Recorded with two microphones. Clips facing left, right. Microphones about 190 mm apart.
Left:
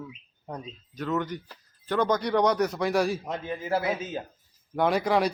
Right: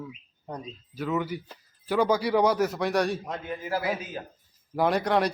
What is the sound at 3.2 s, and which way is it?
Speech, 25° left (ahead or behind).